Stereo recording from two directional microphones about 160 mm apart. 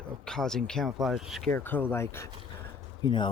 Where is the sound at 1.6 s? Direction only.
10° left (ahead or behind).